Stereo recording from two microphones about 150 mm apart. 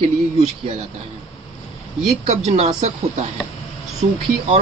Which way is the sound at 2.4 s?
45° right (ahead or behind).